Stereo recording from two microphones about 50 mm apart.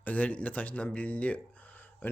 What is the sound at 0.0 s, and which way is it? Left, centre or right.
Speech, left.